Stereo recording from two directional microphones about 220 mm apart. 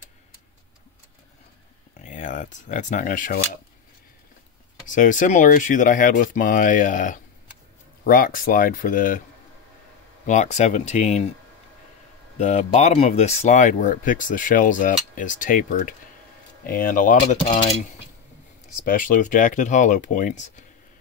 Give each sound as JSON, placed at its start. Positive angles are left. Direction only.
{"t": 2.0, "sound": "speech", "side_deg": 35}
{"t": 4.8, "sound": "speech", "side_deg": 35}
{"t": 10.2, "sound": "speech", "side_deg": 35}
{"t": 12.4, "sound": "speech", "side_deg": 30}
{"t": 18.9, "sound": "speech", "side_deg": 35}